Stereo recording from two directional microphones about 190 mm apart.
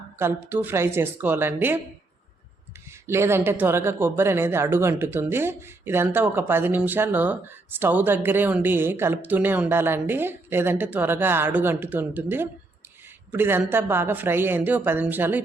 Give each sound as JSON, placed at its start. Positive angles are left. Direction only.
{"t": 0.2, "sound": "speech", "side_deg": -10}
{"t": 3.1, "sound": "speech", "side_deg": -15}